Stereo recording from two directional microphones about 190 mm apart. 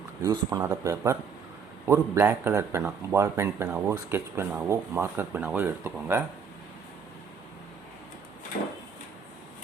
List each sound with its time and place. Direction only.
0.2 s speech: 15° right (ahead or behind)